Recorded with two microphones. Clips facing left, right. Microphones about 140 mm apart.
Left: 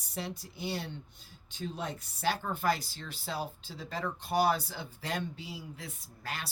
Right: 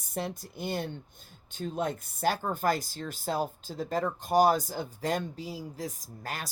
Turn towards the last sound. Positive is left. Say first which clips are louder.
# right 3 dB
turn(degrees=-45)  # may be behind; listen again after turning